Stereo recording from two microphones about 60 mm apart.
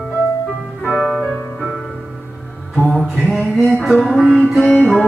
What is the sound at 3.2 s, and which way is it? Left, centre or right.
Music, centre.